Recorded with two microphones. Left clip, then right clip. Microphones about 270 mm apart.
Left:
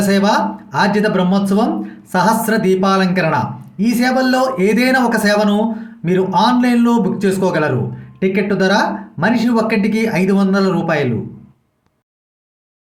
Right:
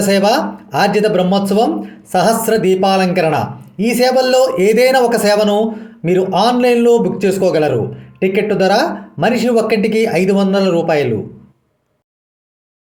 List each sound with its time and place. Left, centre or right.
0.0 s speech: centre